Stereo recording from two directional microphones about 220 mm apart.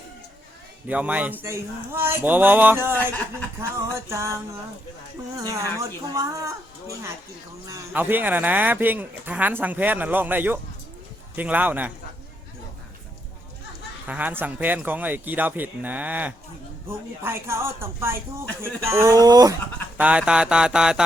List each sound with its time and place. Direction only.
0.9 s speech: 5° right (ahead or behind)
4.1 s speech: 10° right (ahead or behind)
5.4 s speech: 15° right (ahead or behind)
14.1 s speech: 5° right (ahead or behind)
20.0 s speech: 5° right (ahead or behind)